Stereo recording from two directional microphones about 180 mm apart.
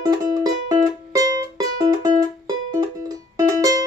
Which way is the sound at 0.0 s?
20° right (ahead or behind).